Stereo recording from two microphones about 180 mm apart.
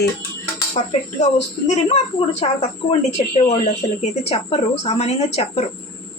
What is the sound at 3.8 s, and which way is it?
Speech, 20° left (ahead or behind).